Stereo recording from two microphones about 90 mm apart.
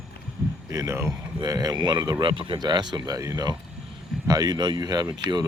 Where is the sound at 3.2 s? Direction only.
40° right (ahead or behind).